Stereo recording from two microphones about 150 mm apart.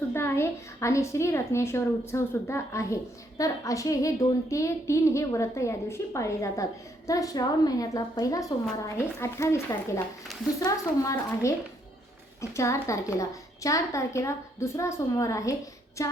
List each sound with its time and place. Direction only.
0.1 s a woman's voice: 15° left (ahead or behind)